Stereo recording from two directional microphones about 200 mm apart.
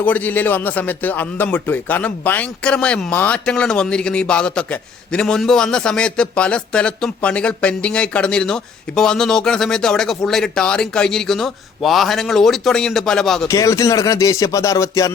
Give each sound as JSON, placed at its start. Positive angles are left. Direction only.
{"t": 0.0, "sound": "a man's voice", "side_deg": 10}
{"t": 13.5, "sound": "speech", "side_deg": 15}